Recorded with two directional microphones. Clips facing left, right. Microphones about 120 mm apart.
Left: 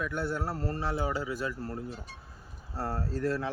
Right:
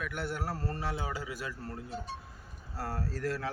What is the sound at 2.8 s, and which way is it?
Speech, 30° left (ahead or behind).